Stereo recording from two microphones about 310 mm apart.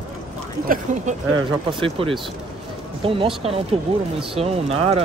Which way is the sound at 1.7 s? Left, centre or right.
Centre.